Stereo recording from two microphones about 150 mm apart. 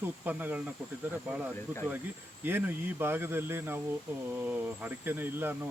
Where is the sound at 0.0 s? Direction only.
10° right (ahead or behind).